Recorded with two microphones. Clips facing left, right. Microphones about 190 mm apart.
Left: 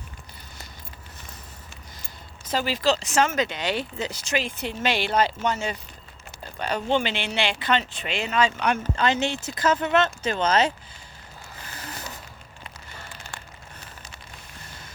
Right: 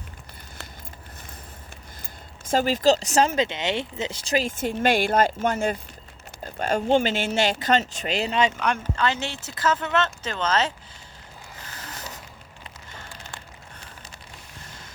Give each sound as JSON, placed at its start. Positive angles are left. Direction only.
{"t": 2.0, "sound": "speech", "side_deg": -50}
{"t": 6.4, "sound": "a sound", "side_deg": -45}
{"t": 6.9, "sound": "speech", "side_deg": -45}
{"t": 8.5, "sound": "speech", "side_deg": 5}
{"t": 9.0, "sound": "speech", "side_deg": 20}